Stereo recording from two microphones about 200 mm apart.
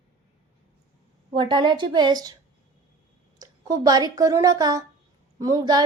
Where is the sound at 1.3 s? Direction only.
25° right (ahead or behind).